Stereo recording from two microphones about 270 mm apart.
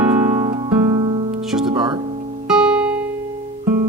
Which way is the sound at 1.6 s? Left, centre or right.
Centre.